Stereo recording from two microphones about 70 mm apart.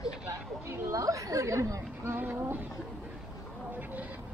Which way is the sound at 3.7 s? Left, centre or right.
Right.